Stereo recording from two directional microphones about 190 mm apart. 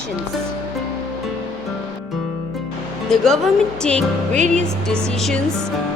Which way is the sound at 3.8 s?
5° left (ahead or behind).